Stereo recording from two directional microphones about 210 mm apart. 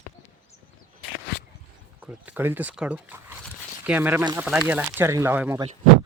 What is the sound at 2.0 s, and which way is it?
Speech, 10° right (ahead or behind).